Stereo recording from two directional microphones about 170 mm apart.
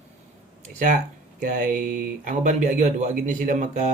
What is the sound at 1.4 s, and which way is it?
Speech, 50° right (ahead or behind).